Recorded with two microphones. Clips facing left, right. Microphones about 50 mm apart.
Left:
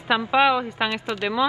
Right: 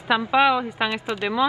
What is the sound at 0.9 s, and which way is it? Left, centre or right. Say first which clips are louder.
Speech: even; centre.